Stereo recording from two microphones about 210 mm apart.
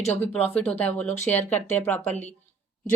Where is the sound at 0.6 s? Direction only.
5° left (ahead or behind).